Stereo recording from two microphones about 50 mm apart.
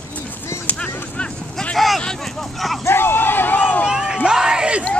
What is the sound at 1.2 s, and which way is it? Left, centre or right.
Speech, left.